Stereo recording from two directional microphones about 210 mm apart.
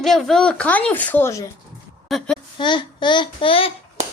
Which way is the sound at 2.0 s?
Centre (ahead or behind).